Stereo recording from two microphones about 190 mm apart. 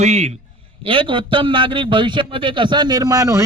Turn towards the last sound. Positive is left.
turn(degrees=-20)  # may be behind; listen again after turning